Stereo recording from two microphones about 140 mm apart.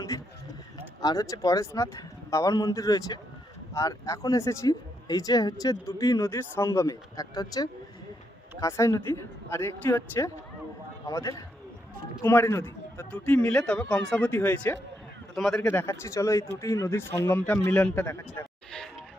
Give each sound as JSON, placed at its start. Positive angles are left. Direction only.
{"t": 1.0, "sound": "a man's voice", "side_deg": 25}
{"t": 15.4, "sound": "a man's voice", "side_deg": 0}
{"t": 15.7, "sound": "speech", "side_deg": 15}